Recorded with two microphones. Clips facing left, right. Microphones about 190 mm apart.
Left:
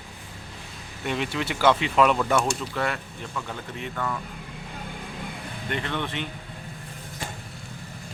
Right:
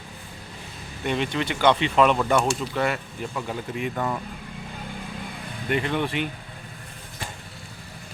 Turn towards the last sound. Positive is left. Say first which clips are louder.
# right 5 dB
turn(degrees=-10)  # may be behind; listen again after turning